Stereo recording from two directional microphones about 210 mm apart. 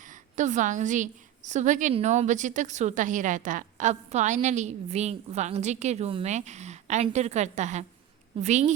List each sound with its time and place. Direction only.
0.1 s a woman's voice: 35° right (ahead or behind)